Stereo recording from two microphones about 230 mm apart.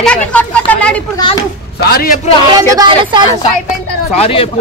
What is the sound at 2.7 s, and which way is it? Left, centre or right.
Speech, centre.